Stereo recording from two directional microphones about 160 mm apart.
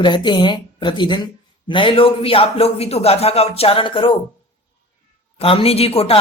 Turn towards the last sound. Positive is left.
turn(degrees=35)  # may be behind; listen again after turning